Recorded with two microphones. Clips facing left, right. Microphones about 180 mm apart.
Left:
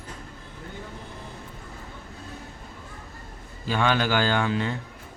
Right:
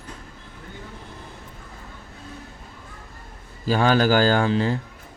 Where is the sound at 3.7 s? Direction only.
40° right (ahead or behind).